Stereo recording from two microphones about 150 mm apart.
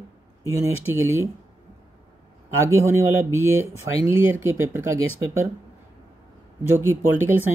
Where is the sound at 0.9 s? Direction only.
15° right (ahead or behind).